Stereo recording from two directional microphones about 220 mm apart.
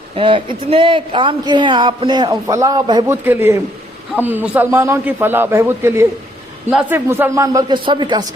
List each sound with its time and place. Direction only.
0.2 s a man's voice: 25° right (ahead or behind)